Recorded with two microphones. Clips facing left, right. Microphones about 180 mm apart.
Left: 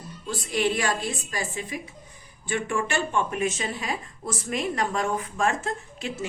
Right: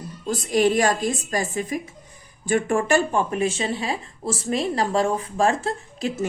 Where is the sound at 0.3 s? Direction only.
40° right (ahead or behind).